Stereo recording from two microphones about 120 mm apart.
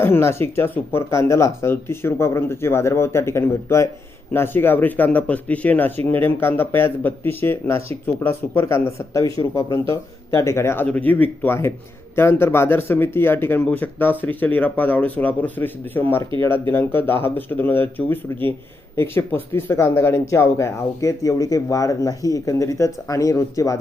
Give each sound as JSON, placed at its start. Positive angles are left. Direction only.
{"t": 0.0, "sound": "speech", "side_deg": 20}